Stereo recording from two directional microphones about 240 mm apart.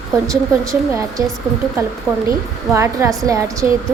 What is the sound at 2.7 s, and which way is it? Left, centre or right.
Speech, centre.